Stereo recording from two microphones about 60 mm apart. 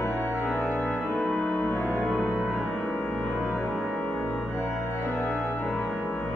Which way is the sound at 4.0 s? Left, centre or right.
Left.